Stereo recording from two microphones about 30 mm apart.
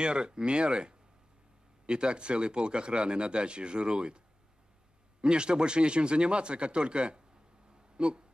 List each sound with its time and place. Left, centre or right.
0.0 s speech: right
5.2 s speech: right